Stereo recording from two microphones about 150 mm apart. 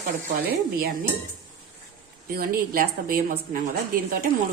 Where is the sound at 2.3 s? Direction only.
75° right (ahead or behind).